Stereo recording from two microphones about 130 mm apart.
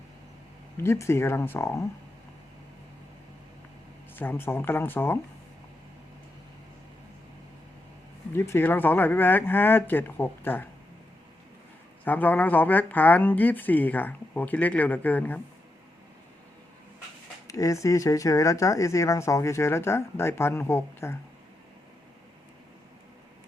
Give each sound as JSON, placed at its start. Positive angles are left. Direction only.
{"t": 0.8, "sound": "speech", "side_deg": 20}
{"t": 4.1, "sound": "speech", "side_deg": 15}
{"t": 8.3, "sound": "speech", "side_deg": 20}
{"t": 12.0, "sound": "speech", "side_deg": 15}
{"t": 17.5, "sound": "speech", "side_deg": 25}